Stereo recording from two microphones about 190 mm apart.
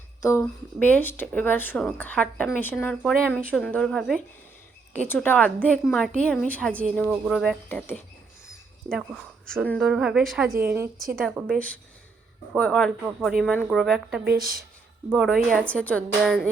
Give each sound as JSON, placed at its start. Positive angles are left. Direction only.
{"t": 0.2, "sound": "a woman's voice", "side_deg": 15}
{"t": 3.4, "sound": "a woman's voice", "side_deg": 5}
{"t": 7.7, "sound": "a woman's voice", "side_deg": 10}
{"t": 11.2, "sound": "a woman's voice", "side_deg": 5}
{"t": 14.3, "sound": "speech", "side_deg": -50}
{"t": 15.1, "sound": "a woman's voice", "side_deg": 0}